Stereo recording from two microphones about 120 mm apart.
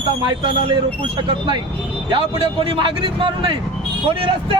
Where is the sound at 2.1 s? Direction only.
45° right (ahead or behind).